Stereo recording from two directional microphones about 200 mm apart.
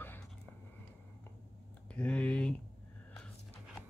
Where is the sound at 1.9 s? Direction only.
5° left (ahead or behind).